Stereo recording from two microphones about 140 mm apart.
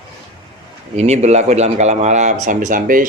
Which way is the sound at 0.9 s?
50° right (ahead or behind).